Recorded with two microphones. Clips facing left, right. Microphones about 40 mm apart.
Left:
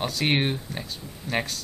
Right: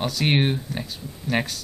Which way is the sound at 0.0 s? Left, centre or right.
Centre.